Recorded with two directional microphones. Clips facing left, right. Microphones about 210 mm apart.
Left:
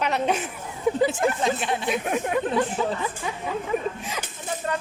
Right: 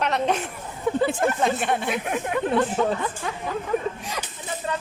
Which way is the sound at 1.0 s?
55° right (ahead or behind).